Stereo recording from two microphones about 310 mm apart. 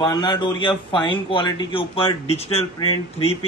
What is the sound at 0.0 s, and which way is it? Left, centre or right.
A man's voice, centre.